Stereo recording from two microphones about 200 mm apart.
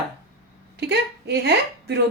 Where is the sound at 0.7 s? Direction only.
55° right (ahead or behind).